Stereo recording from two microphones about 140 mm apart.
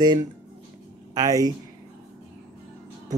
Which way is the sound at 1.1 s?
25° right (ahead or behind).